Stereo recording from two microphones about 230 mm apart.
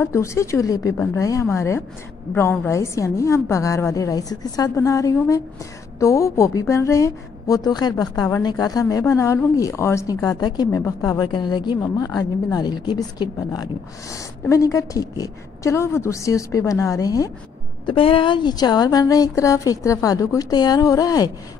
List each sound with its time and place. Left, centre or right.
0.0 s a woman's voice: centre